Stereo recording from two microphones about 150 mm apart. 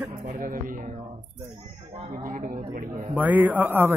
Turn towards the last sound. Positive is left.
turn(degrees=-15)  # may be behind; listen again after turning